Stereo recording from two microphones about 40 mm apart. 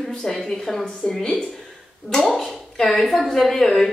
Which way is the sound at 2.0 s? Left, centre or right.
Centre.